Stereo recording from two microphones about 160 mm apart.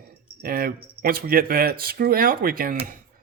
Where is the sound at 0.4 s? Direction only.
70° right (ahead or behind).